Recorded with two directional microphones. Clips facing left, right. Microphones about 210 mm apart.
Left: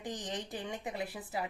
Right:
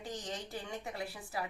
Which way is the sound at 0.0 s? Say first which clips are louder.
Left 2 dB; 15° left (ahead or behind).